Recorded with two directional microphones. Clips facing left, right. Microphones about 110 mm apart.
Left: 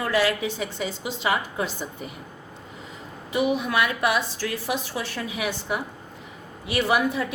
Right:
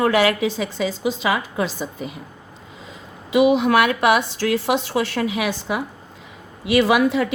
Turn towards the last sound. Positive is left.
turn(degrees=-90)